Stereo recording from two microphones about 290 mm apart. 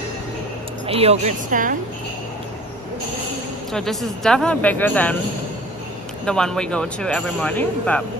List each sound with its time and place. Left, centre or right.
0.8 s a woman's voice: centre
3.7 s speech: centre
6.2 s speech: centre